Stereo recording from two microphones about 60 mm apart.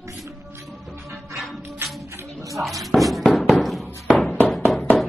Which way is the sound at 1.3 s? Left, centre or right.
Centre.